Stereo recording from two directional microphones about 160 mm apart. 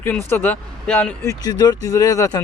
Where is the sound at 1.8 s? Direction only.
20° left (ahead or behind).